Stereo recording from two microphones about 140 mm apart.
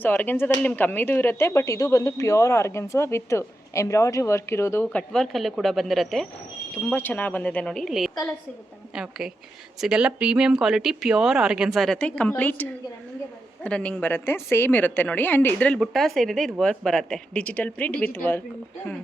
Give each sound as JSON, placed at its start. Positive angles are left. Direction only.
{"t": 0.0, "sound": "speech", "side_deg": 15}
{"t": 6.9, "sound": "speech", "side_deg": 10}
{"t": 13.7, "sound": "speech", "side_deg": 5}